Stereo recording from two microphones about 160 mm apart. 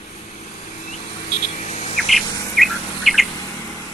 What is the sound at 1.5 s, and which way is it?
Insect, 45° left (ahead or behind).